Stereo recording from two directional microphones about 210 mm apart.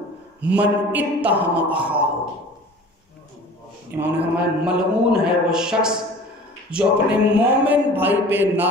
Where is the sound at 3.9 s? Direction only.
10° right (ahead or behind).